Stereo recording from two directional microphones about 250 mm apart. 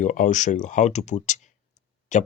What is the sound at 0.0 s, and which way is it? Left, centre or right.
Speech, left.